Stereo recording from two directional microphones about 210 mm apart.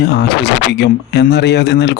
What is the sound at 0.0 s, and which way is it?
Speech, 50° left (ahead or behind).